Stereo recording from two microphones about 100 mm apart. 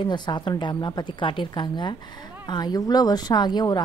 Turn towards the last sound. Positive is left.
turn(degrees=45)  # may be behind; listen again after turning